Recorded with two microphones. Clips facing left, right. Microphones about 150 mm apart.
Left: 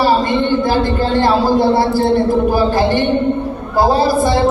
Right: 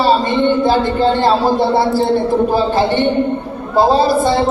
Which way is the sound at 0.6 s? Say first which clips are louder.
Right 2 dB; 25° right (ahead or behind).